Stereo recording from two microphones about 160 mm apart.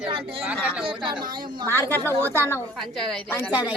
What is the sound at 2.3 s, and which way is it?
Speech, 15° left (ahead or behind).